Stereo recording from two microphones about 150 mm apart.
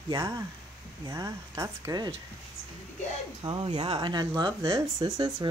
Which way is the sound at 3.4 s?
30° right (ahead or behind).